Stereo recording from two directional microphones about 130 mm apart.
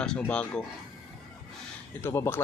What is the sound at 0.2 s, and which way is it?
Speech, 10° left (ahead or behind).